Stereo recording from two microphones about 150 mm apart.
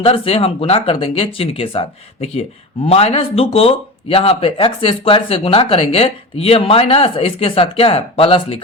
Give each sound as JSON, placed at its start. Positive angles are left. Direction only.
{"t": 0.0, "sound": "speech", "side_deg": 40}
{"t": 2.8, "sound": "speech", "side_deg": 40}